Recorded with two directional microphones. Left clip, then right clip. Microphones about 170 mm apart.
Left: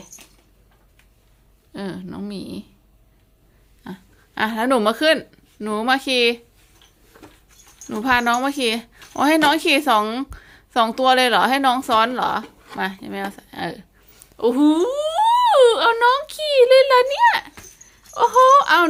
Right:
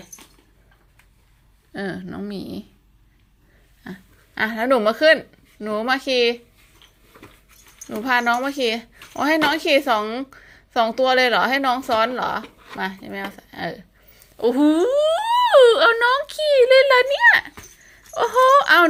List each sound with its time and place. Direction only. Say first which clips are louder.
1.7 s speech: right 2 dB; centre (ahead or behind)
3.8 s speech: left 1 dB; 10° left (ahead or behind)
7.9 s a woman's voice: left 1 dB; 15° left (ahead or behind)